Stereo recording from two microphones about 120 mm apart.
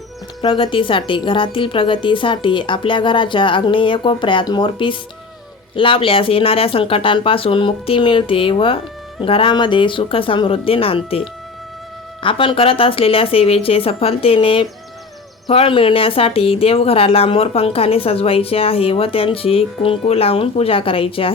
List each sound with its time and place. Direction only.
0.4 s speech: 40° left (ahead or behind)
12.2 s speech: 45° left (ahead or behind)